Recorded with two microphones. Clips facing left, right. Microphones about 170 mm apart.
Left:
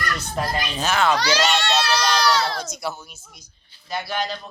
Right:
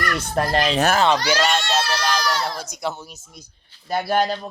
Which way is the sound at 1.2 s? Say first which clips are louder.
Even; 75° left (ahead or behind).